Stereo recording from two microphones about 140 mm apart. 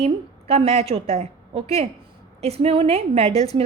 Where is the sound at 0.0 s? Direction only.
45° right (ahead or behind).